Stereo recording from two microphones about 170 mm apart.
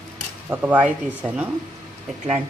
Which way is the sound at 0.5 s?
10° right (ahead or behind).